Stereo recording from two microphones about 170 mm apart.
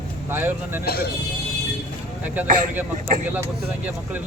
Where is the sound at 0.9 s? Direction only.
65° left (ahead or behind).